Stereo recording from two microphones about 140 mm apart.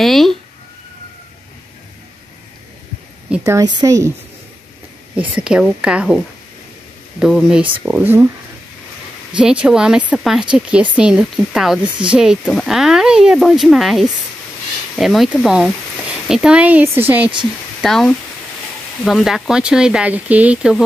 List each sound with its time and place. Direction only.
0.0 s speech: centre (ahead or behind)
3.4 s speech: 25° right (ahead or behind)
5.3 s speech: 5° right (ahead or behind)
9.3 s speech: 5° right (ahead or behind)
17.8 s speech: 5° left (ahead or behind)